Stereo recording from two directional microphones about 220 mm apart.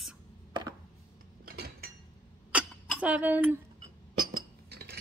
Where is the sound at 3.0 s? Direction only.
5° right (ahead or behind).